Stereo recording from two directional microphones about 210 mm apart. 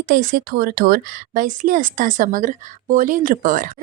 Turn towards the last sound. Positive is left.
turn(degrees=-40)  # may be behind; listen again after turning